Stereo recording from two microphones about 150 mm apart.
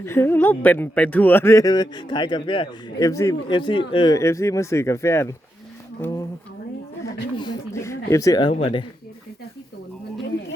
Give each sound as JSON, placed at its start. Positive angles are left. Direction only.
{"t": 0.0, "sound": "speech", "side_deg": 15}
{"t": 3.0, "sound": "speech", "side_deg": 20}
{"t": 3.7, "sound": "speech", "side_deg": 35}
{"t": 4.1, "sound": "speech", "side_deg": 20}
{"t": 7.0, "sound": "a sound", "side_deg": 30}
{"t": 7.7, "sound": "speech", "side_deg": 20}
{"t": 8.5, "sound": "speech", "side_deg": 40}